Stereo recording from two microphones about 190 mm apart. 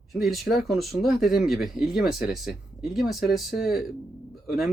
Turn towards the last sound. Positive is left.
turn(degrees=0)  # may be behind; listen again after turning